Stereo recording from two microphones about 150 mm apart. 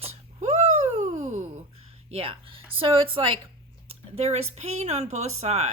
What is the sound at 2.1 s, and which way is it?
A woman's voice, 40° right (ahead or behind).